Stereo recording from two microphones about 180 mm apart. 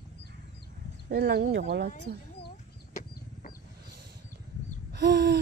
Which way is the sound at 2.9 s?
50° left (ahead or behind).